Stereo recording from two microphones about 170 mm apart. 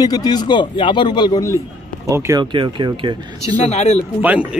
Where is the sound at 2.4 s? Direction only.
30° right (ahead or behind).